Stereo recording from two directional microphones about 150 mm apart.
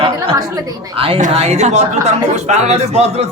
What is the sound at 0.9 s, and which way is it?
Speech, 35° right (ahead or behind).